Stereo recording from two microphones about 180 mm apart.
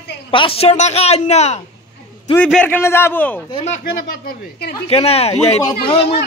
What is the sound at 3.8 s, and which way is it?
Speech, 55° left (ahead or behind).